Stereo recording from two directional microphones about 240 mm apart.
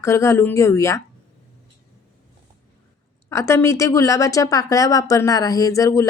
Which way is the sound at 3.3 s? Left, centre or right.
Centre.